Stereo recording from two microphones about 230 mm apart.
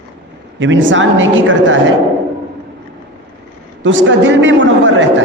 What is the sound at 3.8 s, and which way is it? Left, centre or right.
A man's voice, right.